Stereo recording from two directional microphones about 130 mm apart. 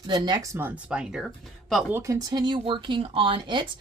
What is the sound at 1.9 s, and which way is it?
Speech, 25° right (ahead or behind).